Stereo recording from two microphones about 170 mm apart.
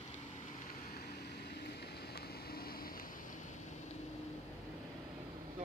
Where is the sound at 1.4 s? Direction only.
70° left (ahead or behind).